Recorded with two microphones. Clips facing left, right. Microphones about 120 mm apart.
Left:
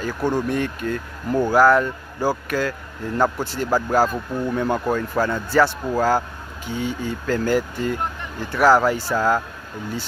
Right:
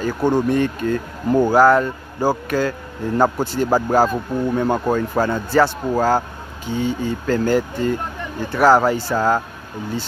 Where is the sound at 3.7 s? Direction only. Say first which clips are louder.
Right 2 dB; 20° right (ahead or behind).